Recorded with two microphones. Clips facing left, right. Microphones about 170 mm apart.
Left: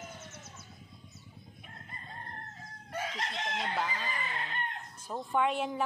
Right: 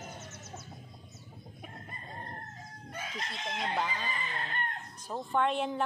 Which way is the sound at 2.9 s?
75° left (ahead or behind).